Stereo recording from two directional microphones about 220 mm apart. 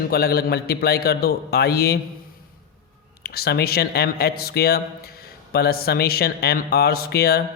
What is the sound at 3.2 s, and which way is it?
Speech, 45° left (ahead or behind).